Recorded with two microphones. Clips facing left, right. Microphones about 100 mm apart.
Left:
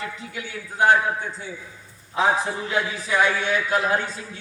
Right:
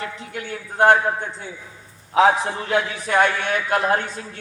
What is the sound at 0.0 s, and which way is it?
A man's voice, 60° right (ahead or behind).